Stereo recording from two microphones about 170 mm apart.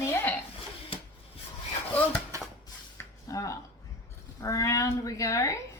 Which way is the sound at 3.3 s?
20° left (ahead or behind).